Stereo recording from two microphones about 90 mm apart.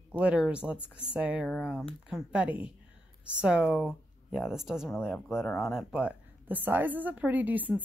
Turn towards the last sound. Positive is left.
turn(degrees=-20)  # may be behind; listen again after turning